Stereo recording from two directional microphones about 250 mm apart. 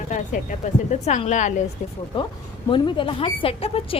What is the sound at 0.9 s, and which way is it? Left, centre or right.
Speech, left.